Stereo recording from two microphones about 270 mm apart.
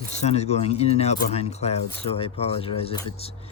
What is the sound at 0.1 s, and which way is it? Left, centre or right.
Speech, left.